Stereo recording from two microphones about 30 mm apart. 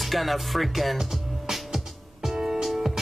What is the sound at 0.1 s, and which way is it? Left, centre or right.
Speech, centre.